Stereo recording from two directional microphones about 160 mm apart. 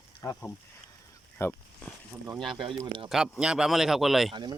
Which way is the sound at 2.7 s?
30° right (ahead or behind).